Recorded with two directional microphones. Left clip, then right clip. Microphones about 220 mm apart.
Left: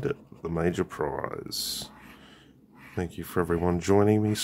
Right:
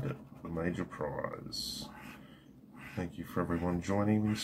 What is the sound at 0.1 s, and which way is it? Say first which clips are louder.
Speech: left 10 dB; 55° left (ahead or behind).